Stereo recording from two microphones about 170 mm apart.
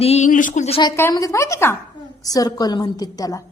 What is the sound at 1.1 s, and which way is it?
A woman's voice, 20° left (ahead or behind).